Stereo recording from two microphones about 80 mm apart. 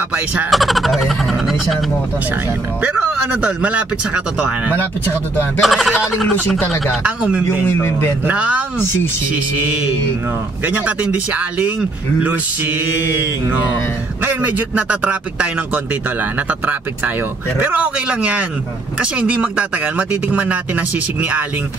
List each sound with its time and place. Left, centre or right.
0.5 s speech: centre
3.3 s speech: centre
5.6 s speech: centre
7.0 s speech: centre
7.6 s a man's voice: left
8.3 s speech: centre
8.7 s a man's voice: left
10.6 s speech: centre
12.2 s music: right
14.8 s speech: centre